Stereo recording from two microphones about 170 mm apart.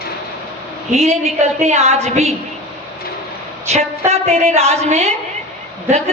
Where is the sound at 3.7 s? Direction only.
40° right (ahead or behind).